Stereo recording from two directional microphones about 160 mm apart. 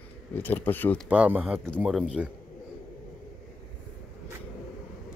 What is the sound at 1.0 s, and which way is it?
Speech, 5° right (ahead or behind).